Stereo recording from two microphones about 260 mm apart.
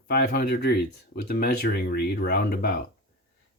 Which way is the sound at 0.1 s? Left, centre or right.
Left.